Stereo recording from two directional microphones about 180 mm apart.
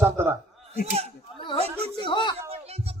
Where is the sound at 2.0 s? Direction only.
25° left (ahead or behind).